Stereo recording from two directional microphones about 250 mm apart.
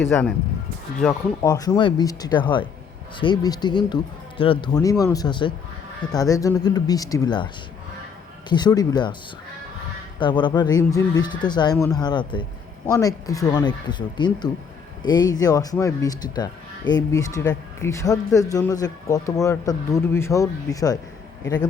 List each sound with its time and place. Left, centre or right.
0.0 s speech: centre
1.4 s speech: centre
10.2 s speech: centre